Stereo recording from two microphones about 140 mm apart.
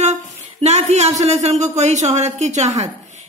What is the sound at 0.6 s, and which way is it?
A woman's voice, 55° right (ahead or behind).